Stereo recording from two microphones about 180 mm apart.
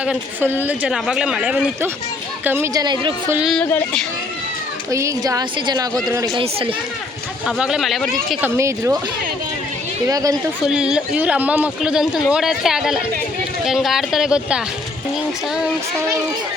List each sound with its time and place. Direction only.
0.0 s a woman's voice: 10° right (ahead or behind); by 3.2 s 25° right (ahead or behind)
3.2 s speech: 10° right (ahead or behind)
3.5 s speech: 10° left (ahead or behind)
4.9 s speech: 15° right (ahead or behind)
6.3 s speech: 30° right (ahead or behind)
7.4 s speech: 5° right (ahead or behind)
8.4 s speech: 15° right (ahead or behind)
10.1 s a woman's voice: 20° right (ahead or behind)
10.7 s speech: 5° right (ahead or behind)